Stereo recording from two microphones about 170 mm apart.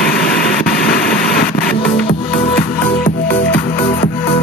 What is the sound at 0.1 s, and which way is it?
Vehicle, 65° left (ahead or behind).